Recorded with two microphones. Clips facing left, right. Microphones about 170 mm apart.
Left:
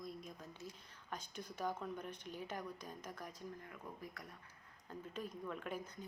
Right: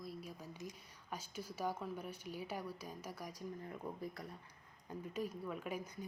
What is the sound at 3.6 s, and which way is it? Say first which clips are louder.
Speech: right 6 dB; 30° right (ahead or behind).